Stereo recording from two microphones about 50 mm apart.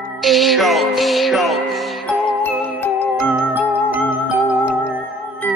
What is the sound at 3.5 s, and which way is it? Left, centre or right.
Music, right.